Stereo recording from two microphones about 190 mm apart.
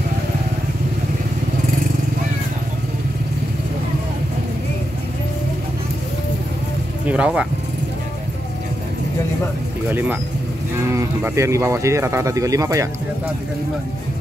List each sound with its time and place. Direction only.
7.1 s speech: 5° right (ahead or behind)
9.8 s speech: 10° right (ahead or behind)